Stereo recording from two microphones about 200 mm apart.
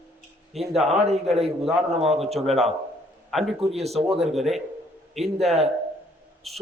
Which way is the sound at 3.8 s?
30° right (ahead or behind).